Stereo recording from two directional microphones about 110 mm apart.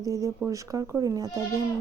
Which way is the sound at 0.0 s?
30° right (ahead or behind).